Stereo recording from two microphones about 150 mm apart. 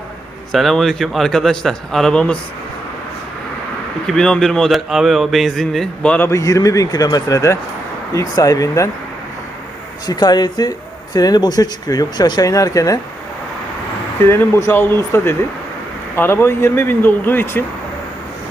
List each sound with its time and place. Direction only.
0.5 s speech: centre (ahead or behind)
4.0 s speech: 5° left (ahead or behind); by 8.9 s 20° left (ahead or behind)
10.1 s speech: 25° left (ahead or behind)
14.3 s speech: 20° left (ahead or behind)